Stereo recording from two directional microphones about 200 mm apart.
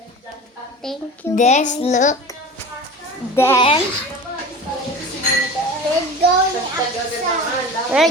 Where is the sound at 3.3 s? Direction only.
10° left (ahead or behind).